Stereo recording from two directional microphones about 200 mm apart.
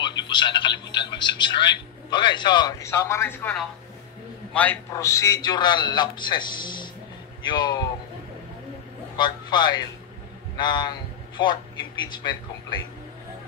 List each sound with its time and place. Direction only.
0.0 s telephone: 25° left (ahead or behind)
1.1 s a man's voice: 20° left (ahead or behind)
9.1 s a man's voice: 20° left (ahead or behind)